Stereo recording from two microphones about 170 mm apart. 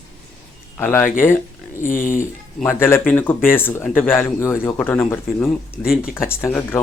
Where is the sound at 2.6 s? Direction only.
15° left (ahead or behind).